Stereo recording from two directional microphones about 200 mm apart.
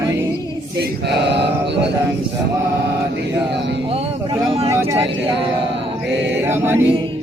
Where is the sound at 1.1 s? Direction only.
60° right (ahead or behind).